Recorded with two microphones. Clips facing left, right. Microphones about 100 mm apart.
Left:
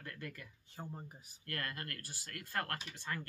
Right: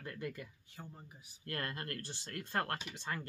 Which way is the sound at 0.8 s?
40° left (ahead or behind).